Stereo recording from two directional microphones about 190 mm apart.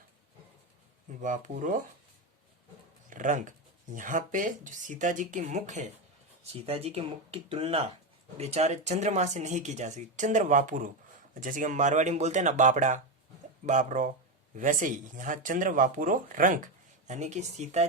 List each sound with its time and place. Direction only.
1.2 s speech: 40° right (ahead or behind)
3.1 s speech: 40° right (ahead or behind)